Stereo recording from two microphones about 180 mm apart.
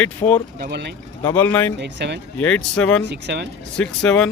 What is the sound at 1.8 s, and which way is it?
Speech, 70° right (ahead or behind).